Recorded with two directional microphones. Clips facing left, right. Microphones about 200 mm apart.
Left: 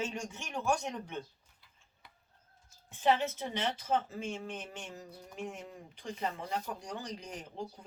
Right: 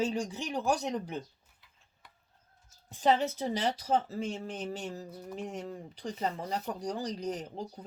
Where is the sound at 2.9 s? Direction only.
35° right (ahead or behind).